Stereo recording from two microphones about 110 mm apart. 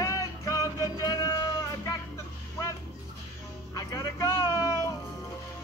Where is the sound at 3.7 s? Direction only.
35° left (ahead or behind).